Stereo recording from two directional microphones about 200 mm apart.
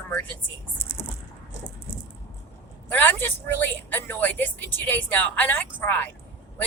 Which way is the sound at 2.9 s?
10° left (ahead or behind).